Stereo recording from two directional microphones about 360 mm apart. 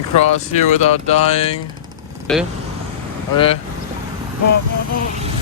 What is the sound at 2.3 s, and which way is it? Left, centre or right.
Speech, centre.